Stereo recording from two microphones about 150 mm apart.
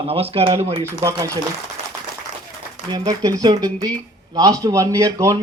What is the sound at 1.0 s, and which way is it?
Speech, 20° right (ahead or behind).